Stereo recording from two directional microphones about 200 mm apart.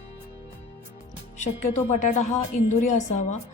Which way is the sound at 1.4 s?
35° left (ahead or behind).